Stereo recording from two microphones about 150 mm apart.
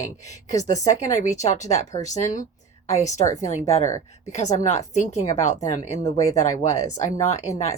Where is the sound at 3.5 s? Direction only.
50° left (ahead or behind).